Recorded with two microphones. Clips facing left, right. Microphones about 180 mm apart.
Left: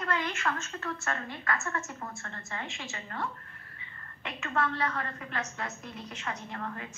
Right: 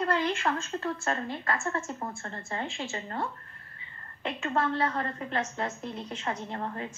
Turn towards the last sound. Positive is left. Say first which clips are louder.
# right 4 dB
turn(degrees=-30)  # may be behind; listen again after turning